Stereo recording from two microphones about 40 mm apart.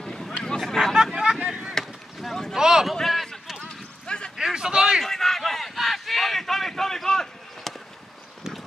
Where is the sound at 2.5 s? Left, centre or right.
Centre.